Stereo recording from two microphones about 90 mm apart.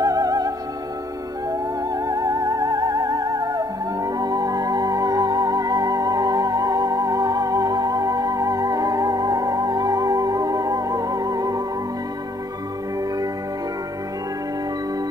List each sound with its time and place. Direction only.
0.0 s music: 40° right (ahead or behind)
1.5 s music: 40° right (ahead or behind)